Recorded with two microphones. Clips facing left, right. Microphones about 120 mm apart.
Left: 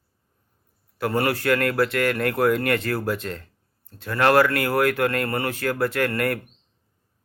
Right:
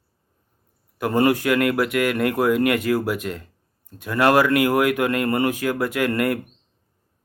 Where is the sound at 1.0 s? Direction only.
20° right (ahead or behind).